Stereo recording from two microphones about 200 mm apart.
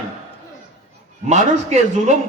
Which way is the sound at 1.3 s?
35° right (ahead or behind).